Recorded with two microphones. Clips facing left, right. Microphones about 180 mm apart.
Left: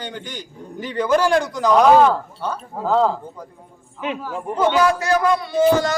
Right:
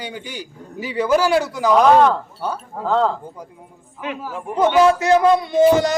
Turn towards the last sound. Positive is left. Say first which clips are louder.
# right 4 dB
turn(degrees=-20)  # may be behind; listen again after turning